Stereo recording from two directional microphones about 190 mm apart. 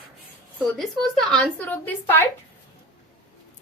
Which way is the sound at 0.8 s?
5° left (ahead or behind).